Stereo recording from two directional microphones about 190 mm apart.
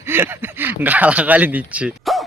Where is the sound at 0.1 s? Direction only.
10° right (ahead or behind).